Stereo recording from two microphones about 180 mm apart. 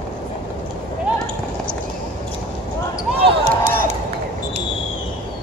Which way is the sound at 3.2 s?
40° right (ahead or behind).